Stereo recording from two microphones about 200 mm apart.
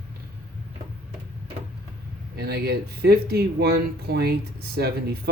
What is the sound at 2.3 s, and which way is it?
A man's voice, 55° right (ahead or behind).